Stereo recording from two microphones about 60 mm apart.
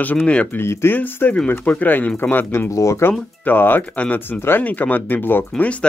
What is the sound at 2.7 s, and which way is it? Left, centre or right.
Speech, left.